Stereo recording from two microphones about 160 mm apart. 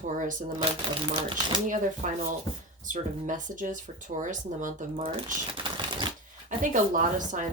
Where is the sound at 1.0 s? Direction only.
30° right (ahead or behind).